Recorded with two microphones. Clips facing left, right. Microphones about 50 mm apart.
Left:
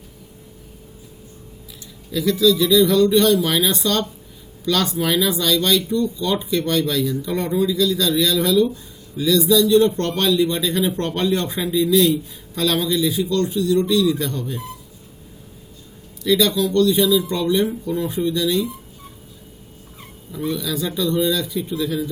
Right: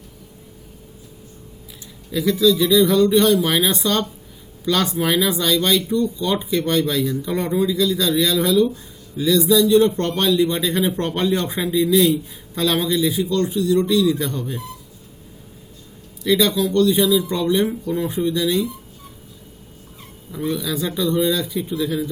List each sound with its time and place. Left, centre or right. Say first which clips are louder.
2.1 s speech: even; centre
16.2 s speech: even; centre
20.3 s a man's voice: right 1 dB; centre